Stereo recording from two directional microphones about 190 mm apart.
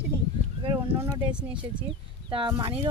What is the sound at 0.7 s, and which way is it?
Speech, 15° right (ahead or behind).